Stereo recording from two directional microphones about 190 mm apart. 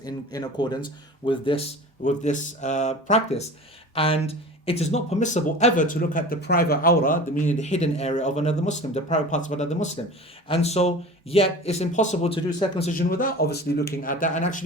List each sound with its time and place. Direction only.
0.0 s speech: 20° left (ahead or behind)
12.5 s speech: 20° left (ahead or behind)
13.0 s speech: 50° left (ahead or behind)